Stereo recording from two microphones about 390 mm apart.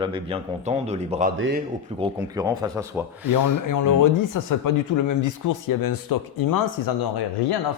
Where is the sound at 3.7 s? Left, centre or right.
Left.